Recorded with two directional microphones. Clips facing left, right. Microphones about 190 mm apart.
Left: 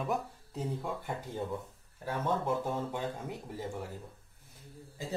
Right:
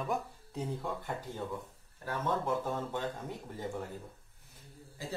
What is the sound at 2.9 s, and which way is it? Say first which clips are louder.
Speech: even; 10° left (ahead or behind).